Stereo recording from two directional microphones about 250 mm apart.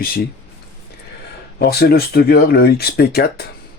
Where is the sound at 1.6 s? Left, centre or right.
Left.